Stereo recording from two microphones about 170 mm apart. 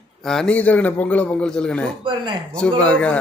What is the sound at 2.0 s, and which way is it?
Speech, 30° right (ahead or behind).